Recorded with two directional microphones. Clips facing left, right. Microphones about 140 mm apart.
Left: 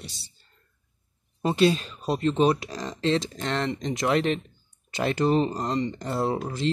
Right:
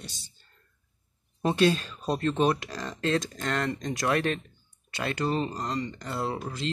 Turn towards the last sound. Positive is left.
turn(degrees=25)  # may be behind; listen again after turning